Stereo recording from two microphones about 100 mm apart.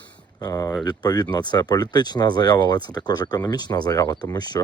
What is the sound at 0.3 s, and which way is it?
Speech, 40° left (ahead or behind).